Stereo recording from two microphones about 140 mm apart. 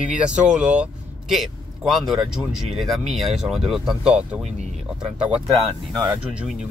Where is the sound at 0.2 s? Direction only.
5° right (ahead or behind).